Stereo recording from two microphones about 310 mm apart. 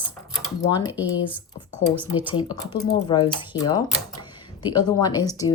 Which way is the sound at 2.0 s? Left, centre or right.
Centre.